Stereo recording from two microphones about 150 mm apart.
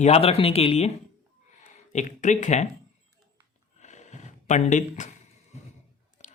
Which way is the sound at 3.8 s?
50° left (ahead or behind).